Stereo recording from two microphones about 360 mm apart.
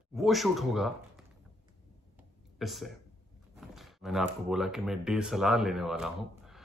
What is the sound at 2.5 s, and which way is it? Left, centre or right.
Speech, centre.